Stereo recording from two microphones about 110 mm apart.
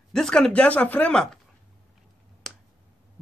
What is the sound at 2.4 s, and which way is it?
Finger snapping, centre (ahead or behind).